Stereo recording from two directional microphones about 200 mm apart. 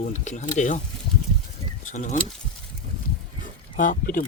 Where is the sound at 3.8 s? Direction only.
40° left (ahead or behind).